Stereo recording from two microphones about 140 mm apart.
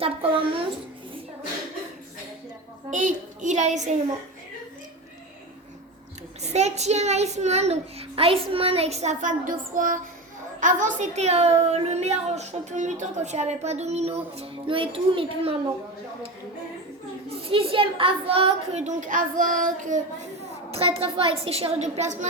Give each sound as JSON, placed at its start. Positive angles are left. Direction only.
{"t": 0.0, "sound": "a child's voice", "side_deg": -40}
{"t": 2.9, "sound": "a woman's voice", "side_deg": -65}
{"t": 6.4, "sound": "a child's voice", "side_deg": -50}
{"t": 14.3, "sound": "a child's voice", "side_deg": -40}
{"t": 17.2, "sound": "a woman's voice", "side_deg": -40}
{"t": 20.7, "sound": "a child's voice", "side_deg": -45}